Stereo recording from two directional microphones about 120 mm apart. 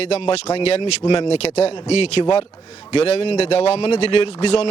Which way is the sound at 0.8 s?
40° left (ahead or behind).